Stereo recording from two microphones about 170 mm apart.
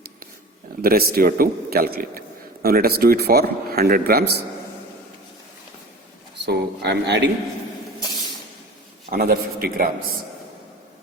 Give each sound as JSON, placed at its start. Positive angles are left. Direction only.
{"t": 0.8, "sound": "speech", "side_deg": -60}
{"t": 6.4, "sound": "speech", "side_deg": -75}
{"t": 9.0, "sound": "speech", "side_deg": -60}